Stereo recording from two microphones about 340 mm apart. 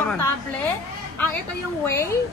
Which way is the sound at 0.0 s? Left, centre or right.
Centre.